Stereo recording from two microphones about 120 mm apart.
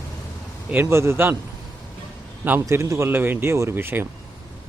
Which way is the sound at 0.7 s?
20° right (ahead or behind).